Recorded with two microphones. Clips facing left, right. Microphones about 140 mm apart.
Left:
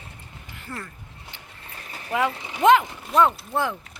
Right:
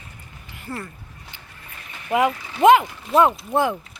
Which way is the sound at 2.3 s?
20° left (ahead or behind).